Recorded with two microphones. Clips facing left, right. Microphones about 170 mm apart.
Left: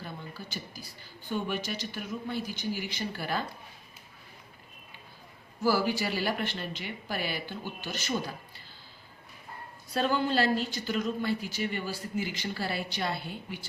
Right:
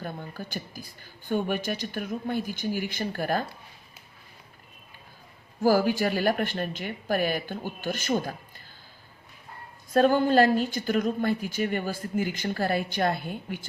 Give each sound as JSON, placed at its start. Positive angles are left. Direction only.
{"t": 0.0, "sound": "speech", "side_deg": -50}
{"t": 5.6, "sound": "speech", "side_deg": -50}
{"t": 9.9, "sound": "speech", "side_deg": -50}